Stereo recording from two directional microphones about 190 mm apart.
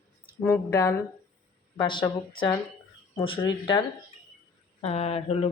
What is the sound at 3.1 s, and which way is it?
Speech, 25° left (ahead or behind).